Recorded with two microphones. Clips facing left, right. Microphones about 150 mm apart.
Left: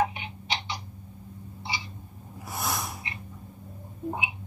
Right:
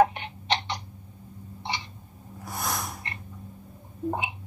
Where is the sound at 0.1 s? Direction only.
5° left (ahead or behind).